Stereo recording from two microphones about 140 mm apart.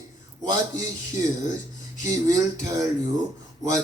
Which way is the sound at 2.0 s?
25° right (ahead or behind).